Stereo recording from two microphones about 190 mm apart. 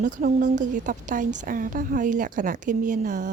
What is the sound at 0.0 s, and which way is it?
A woman's voice, 45° right (ahead or behind).